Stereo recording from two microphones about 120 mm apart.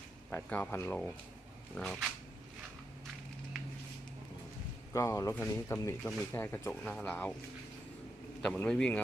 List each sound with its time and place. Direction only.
0.3 s speech: 15° left (ahead or behind)
1.7 s a sound: 5° left (ahead or behind)
4.9 s speech: 30° left (ahead or behind)
5.3 s speech: 15° left (ahead or behind)
8.4 s speech: 5° left (ahead or behind)